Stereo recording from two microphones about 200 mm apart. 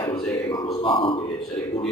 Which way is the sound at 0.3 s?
20° left (ahead or behind).